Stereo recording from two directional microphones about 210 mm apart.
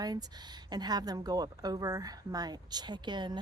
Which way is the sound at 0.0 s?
20° right (ahead or behind).